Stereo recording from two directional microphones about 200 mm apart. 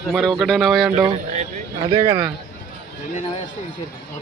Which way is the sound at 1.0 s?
35° right (ahead or behind).